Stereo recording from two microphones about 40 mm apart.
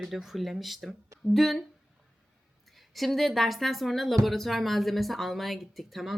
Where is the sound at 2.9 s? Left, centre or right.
Centre.